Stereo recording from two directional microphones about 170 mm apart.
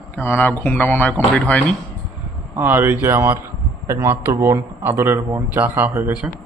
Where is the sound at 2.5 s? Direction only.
10° right (ahead or behind).